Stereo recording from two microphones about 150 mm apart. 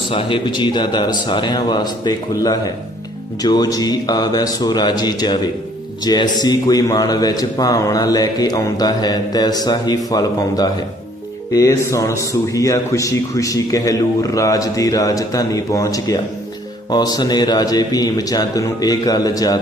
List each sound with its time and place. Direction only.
0.1 s a man's voice: 35° left (ahead or behind)